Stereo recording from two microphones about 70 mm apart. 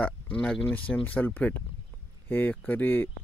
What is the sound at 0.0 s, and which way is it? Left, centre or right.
Speech, centre.